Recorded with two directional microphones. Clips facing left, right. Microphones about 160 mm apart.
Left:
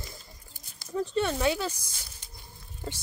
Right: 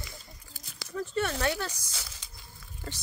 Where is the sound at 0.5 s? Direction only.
90° right.